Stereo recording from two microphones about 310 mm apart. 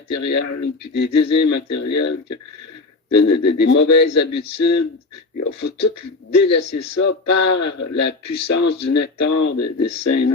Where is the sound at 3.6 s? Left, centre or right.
Left.